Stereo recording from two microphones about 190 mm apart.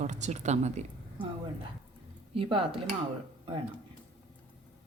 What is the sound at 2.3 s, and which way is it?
Speech, 30° right (ahead or behind).